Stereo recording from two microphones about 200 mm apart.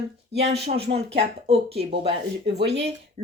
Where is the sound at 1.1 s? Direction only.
30° right (ahead or behind).